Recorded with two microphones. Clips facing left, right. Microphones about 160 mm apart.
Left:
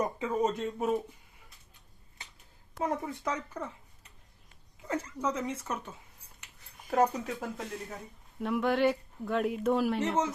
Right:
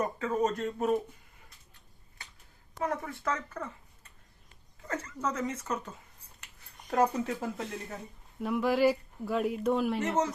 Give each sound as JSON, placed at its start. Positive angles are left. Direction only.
{"t": 0.0, "sound": "speech", "side_deg": 10}
{"t": 2.8, "sound": "speech", "side_deg": 20}
{"t": 4.9, "sound": "speech", "side_deg": 10}